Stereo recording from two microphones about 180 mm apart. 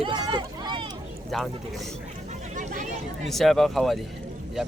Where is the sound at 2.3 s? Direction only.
40° right (ahead or behind).